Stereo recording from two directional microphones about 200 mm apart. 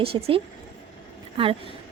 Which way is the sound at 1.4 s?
25° right (ahead or behind).